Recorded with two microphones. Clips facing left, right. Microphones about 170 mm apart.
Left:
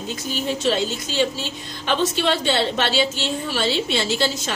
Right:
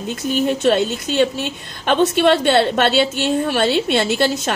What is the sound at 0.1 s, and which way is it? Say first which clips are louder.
A woman's voice: right 7 dB; 55° right (ahead or behind).